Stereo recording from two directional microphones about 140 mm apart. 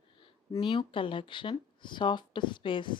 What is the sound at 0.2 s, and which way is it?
A woman's voice, 35° left (ahead or behind).